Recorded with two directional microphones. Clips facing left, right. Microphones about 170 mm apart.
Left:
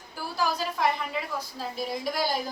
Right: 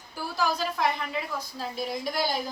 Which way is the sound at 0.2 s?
5° left (ahead or behind).